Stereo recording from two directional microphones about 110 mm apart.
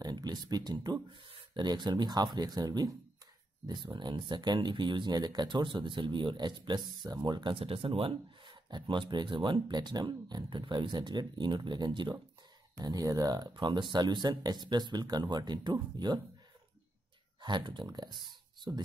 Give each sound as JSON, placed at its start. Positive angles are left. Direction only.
{"t": 0.0, "sound": "speech", "side_deg": -40}
{"t": 3.6, "sound": "speech", "side_deg": -45}
{"t": 7.5, "sound": "speech", "side_deg": -55}
{"t": 13.5, "sound": "speech", "side_deg": -45}
{"t": 17.4, "sound": "speech", "side_deg": -45}